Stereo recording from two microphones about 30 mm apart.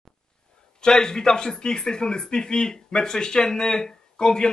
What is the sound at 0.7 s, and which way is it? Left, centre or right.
Speech, left.